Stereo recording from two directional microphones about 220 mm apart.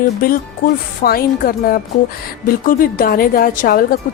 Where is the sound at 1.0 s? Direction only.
45° left (ahead or behind).